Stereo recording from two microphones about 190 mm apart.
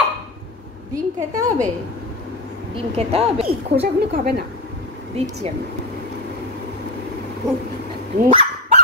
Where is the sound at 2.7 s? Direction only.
30° right (ahead or behind).